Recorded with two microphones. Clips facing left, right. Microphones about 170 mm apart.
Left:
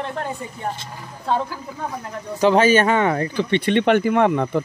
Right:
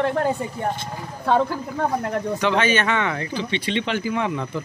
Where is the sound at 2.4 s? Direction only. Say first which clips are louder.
Left 8 dB; 40° left (ahead or behind).